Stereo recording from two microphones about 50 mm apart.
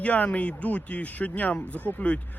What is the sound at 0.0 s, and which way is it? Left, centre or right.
Speech, left.